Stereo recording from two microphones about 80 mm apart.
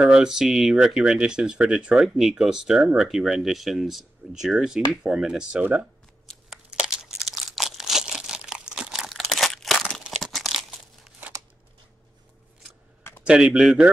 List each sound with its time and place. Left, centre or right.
0.0 s speech: centre
6.5 s crumpling: centre
13.2 s speech: centre